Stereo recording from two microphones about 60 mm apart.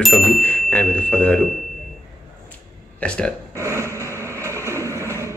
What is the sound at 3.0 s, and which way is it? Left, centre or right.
Speech, centre.